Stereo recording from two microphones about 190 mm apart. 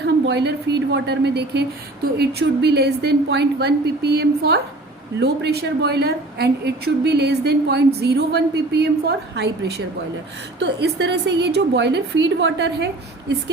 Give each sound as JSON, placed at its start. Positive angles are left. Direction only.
{"t": 0.0, "sound": "a woman's voice", "side_deg": -65}